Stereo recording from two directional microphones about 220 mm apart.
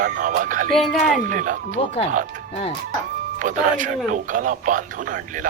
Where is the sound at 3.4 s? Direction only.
35° right (ahead or behind).